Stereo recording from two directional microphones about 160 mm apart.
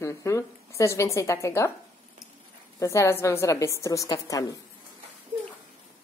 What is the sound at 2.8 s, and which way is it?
A woman's voice, 15° left (ahead or behind).